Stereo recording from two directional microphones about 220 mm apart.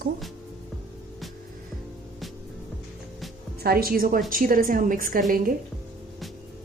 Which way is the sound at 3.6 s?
45° right (ahead or behind).